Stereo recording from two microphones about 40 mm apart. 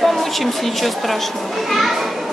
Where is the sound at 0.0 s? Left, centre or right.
Centre.